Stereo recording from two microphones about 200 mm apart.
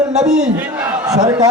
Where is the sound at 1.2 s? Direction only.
20° right (ahead or behind).